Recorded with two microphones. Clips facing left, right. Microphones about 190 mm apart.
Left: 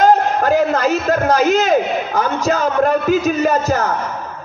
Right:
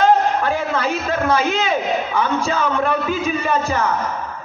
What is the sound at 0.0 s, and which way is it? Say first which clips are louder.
A man's voice: left 2 dB; 40° left (ahead or behind).